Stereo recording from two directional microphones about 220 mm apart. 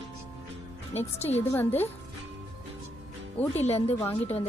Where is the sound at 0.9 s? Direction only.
30° left (ahead or behind).